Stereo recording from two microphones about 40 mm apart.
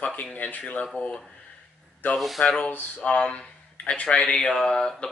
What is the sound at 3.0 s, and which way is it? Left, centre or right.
Speech, left.